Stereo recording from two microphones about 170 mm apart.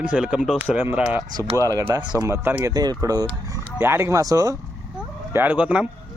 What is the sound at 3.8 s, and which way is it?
Speech, 15° right (ahead or behind).